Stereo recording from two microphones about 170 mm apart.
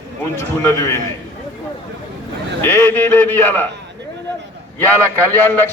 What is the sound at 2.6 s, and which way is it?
A man's voice, 15° left (ahead or behind).